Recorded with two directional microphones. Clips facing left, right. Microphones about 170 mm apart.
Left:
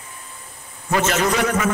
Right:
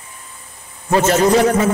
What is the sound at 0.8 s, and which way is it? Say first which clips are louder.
Speech: right 6 dB; 35° right (ahead or behind).